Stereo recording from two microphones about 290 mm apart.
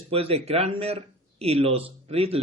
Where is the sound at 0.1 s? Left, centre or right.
Centre.